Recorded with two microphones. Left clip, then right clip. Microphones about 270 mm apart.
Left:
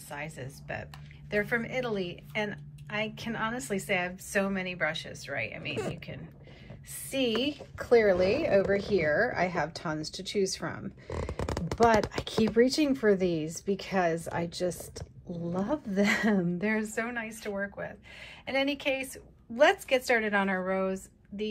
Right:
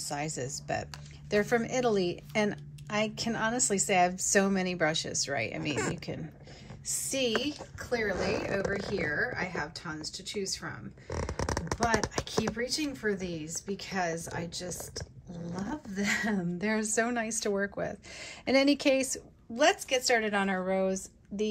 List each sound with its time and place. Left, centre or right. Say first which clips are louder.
0.1 s a woman's voice: right 3 dB; centre
6.9 s a woman's voice: even; centre
11.3 s a sound: right 2 dB; left
11.8 s a woman's voice: left 6 dB; centre
19.5 s a woman's voice: left 2 dB; centre